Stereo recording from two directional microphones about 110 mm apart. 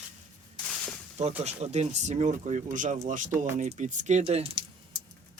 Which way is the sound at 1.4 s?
85° right.